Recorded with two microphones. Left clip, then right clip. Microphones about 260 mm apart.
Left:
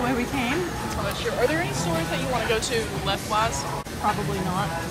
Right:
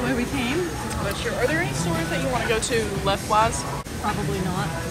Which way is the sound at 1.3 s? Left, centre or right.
Centre.